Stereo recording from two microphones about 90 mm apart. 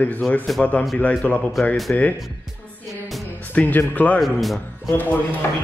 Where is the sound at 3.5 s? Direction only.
20° left (ahead or behind).